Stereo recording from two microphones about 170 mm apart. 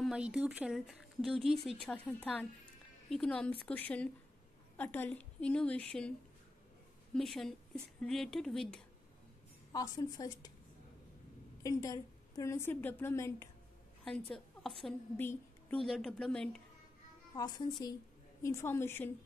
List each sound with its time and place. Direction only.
0.0 s speech: 5° right (ahead or behind)
1.5 s speech: 35° right (ahead or behind)
1.8 s a woman's voice: 5° left (ahead or behind)
7.2 s speech: centre (ahead or behind)
9.7 s a woman's voice: 25° left (ahead or behind)
11.6 s a woman's voice: 20° left (ahead or behind)
14.0 s a woman's voice: 5° left (ahead or behind)
15.8 s speech: centre (ahead or behind)
17.4 s a woman's voice: 25° left (ahead or behind)